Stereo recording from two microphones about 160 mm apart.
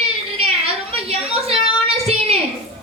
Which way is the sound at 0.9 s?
40° right (ahead or behind).